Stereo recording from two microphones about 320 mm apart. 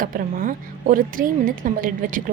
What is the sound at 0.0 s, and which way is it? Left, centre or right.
A woman's voice, right.